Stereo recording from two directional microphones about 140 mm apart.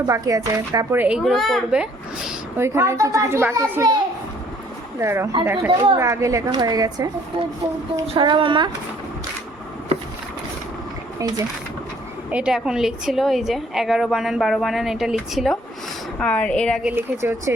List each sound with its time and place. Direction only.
0.0 s a child's voice: 25° right (ahead or behind)
0.9 s speech: 10° right (ahead or behind)
1.2 s a woman's voice: centre (ahead or behind)
2.6 s a child's voice: 20° right (ahead or behind)
5.7 s speech: 35° right (ahead or behind)
6.0 s a child's voice: 20° right (ahead or behind)
8.0 s speech: 40° right (ahead or behind)
12.3 s a woman's voice: 5° right (ahead or behind)
16.1 s a woman's voice: 10° left (ahead or behind)
16.8 s speech: 15° right (ahead or behind)